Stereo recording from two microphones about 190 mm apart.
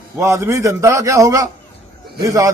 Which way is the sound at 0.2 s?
15° right (ahead or behind).